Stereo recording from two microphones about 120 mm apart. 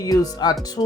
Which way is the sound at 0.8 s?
45° left (ahead or behind).